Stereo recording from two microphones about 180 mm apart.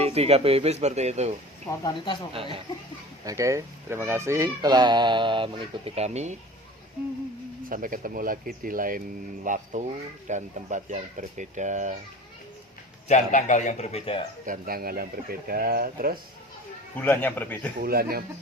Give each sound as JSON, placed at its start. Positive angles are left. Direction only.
{"t": 0.0, "sound": "speech", "side_deg": -35}
{"t": 3.2, "sound": "speech", "side_deg": -15}
{"t": 7.7, "sound": "speech", "side_deg": -50}
{"t": 13.1, "sound": "a man's voice", "side_deg": 40}
{"t": 14.4, "sound": "speech", "side_deg": -50}
{"t": 17.0, "sound": "speech", "side_deg": 10}
{"t": 17.7, "sound": "speech", "side_deg": -55}